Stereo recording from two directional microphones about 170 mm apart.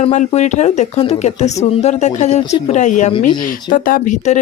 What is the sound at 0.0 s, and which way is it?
Speech, 45° left (ahead or behind).